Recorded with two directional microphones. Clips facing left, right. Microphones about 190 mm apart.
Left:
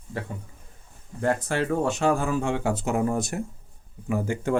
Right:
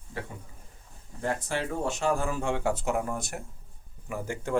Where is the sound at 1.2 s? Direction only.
60° left (ahead or behind); by 2.5 s 80° left.